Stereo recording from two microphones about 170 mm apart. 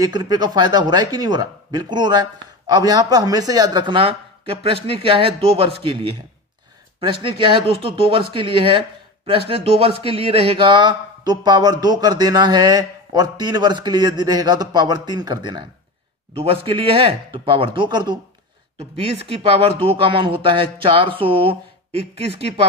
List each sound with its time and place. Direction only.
0.0 s a man's voice: 25° right (ahead or behind)